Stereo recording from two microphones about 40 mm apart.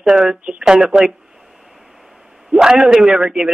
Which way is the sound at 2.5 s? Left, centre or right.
Centre.